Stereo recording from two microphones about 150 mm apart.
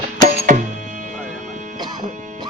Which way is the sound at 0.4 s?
60° right (ahead or behind).